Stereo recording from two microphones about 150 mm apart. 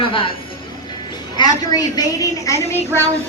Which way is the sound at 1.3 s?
25° left (ahead or behind).